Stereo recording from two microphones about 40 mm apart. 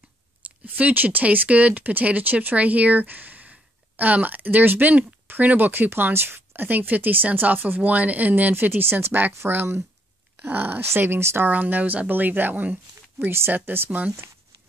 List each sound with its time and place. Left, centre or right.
0.4 s speech: right
5.7 s speech: right
7.9 s speech: right
10.4 s speech: right
10.8 s speech: right
11.4 s speech: right
13.6 s speech: right